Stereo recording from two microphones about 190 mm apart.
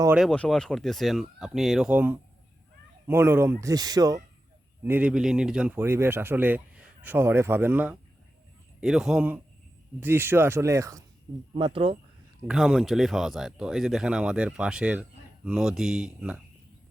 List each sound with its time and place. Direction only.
0.2 s speech: 5° left (ahead or behind); by 4.2 s 20° right (ahead or behind)
4.8 s speech: 10° right (ahead or behind)
11.5 s speech: 25° right (ahead or behind)
12.5 s speech: 5° right (ahead or behind)